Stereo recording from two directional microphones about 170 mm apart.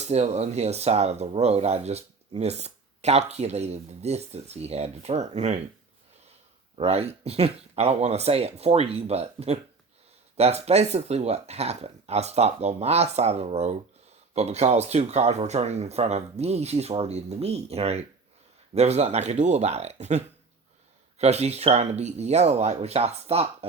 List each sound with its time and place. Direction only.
0.0 s speech: 40° right (ahead or behind)
6.7 s speech: 35° right (ahead or behind)